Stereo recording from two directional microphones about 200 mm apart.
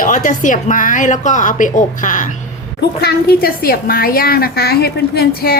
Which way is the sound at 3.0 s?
50° left (ahead or behind).